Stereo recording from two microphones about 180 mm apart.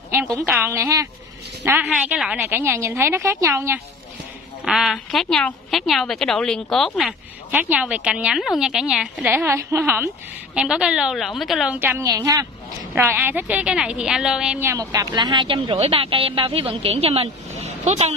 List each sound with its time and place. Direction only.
0.1 s a woman's voice: 15° right (ahead or behind)
4.6 s a woman's voice: centre (ahead or behind)
14.7 s speech: 20° right (ahead or behind); by 18.1 s 35° right (ahead or behind)